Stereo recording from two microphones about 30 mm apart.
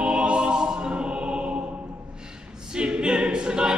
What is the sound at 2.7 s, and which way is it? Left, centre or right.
A capella, right.